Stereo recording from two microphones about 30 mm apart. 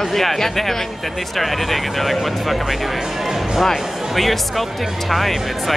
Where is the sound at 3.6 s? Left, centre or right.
Centre.